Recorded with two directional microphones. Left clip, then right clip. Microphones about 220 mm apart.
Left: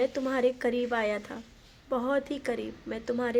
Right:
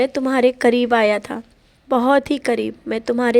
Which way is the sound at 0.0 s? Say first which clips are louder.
Right 10 dB; 40° right (ahead or behind).